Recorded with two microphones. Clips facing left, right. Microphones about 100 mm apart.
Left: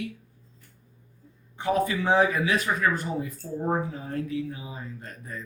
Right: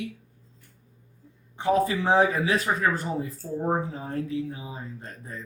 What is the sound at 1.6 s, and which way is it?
Speech, 30° right (ahead or behind).